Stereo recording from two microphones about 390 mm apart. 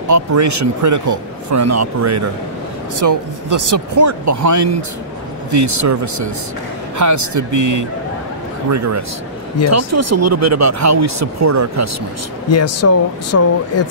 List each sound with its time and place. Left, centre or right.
0.1 s speech: right
12.4 s speech: left